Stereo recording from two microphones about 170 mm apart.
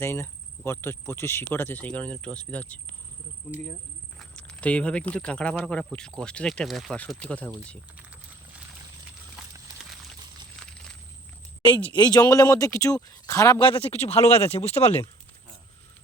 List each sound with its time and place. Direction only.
0.0 s speech: 15° left (ahead or behind)
4.2 s speech: 5° left (ahead or behind)
10.6 s a sound: 5° left (ahead or behind)
11.9 s speech: 25° left (ahead or behind)
13.8 s speech: 35° left (ahead or behind)